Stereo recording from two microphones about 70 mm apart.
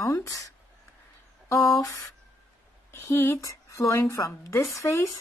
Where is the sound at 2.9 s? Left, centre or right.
Left.